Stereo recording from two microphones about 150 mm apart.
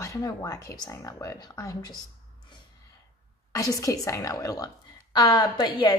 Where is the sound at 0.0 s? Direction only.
20° left (ahead or behind).